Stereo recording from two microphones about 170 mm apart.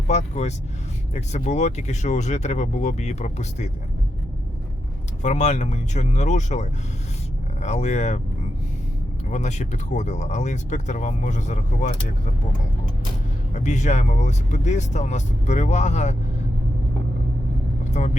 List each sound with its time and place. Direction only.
0.1 s speech: 40° left (ahead or behind)
5.2 s speech: 45° left (ahead or behind)
9.3 s speech: 45° left (ahead or behind)
13.5 s speech: 45° left (ahead or behind)
17.9 s speech: 45° left (ahead or behind)